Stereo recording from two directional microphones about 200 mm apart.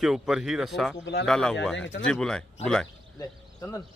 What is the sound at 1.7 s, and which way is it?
Speech, 65° left (ahead or behind).